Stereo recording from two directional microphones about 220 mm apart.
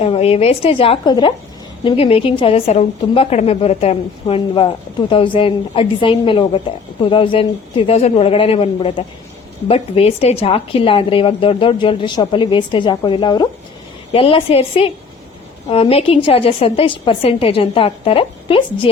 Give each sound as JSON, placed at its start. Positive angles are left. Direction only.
{"t": 0.0, "sound": "a woman's voice", "side_deg": 25}